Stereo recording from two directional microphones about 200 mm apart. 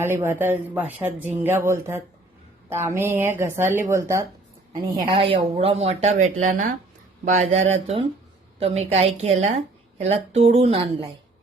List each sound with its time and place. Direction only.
0.0 s a woman's voice: 10° right (ahead or behind); by 10.8 s 30° right (ahead or behind)